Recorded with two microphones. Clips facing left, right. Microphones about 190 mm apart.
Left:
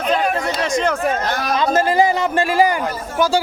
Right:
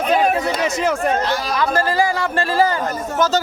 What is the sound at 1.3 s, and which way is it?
Speech, 55° left (ahead or behind).